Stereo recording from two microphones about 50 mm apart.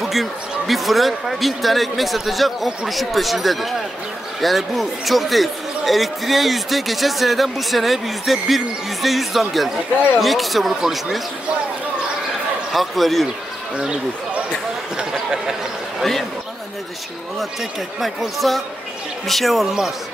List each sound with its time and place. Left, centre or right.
0.0 s speech: centre
12.7 s speech: centre
13.7 s speech: centre
15.0 s a sound: centre
16.0 s speech: centre
17.4 s speech: centre